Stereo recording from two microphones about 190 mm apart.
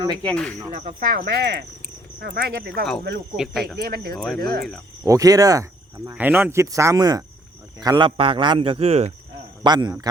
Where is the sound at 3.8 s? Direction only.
55° right (ahead or behind).